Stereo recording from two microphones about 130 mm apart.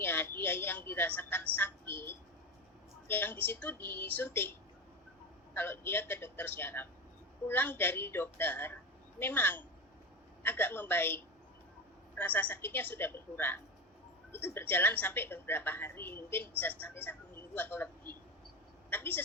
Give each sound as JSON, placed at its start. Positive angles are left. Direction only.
{"t": 0.0, "sound": "a woman's voice", "side_deg": 15}
{"t": 5.5, "sound": "a woman's voice", "side_deg": 15}
{"t": 18.9, "sound": "vehicle", "side_deg": 15}